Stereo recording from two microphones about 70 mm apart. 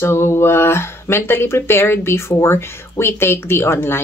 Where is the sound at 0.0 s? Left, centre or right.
Left.